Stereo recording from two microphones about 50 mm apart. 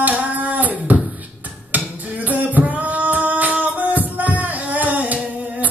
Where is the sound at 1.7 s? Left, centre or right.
Right.